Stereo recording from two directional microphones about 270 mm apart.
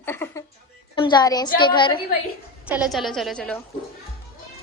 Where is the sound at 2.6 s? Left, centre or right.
Centre.